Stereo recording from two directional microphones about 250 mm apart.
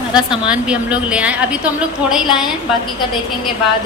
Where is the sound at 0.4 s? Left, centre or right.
Centre.